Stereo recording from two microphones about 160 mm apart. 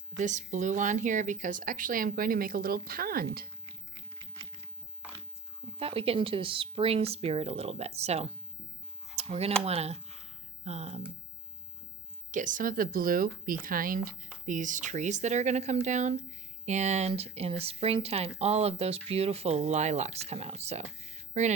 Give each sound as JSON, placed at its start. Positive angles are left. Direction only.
{"t": 0.2, "sound": "speech", "side_deg": -50}
{"t": 5.7, "sound": "speech", "side_deg": -35}
{"t": 9.1, "sound": "a sound", "side_deg": -40}
{"t": 9.6, "sound": "speech", "side_deg": -40}
{"t": 12.3, "sound": "speech", "side_deg": -55}